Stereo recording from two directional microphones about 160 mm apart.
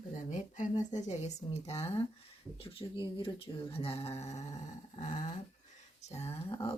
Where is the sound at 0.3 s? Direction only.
50° left (ahead or behind).